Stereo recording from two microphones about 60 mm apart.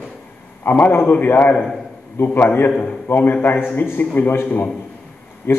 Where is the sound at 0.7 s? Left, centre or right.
Left.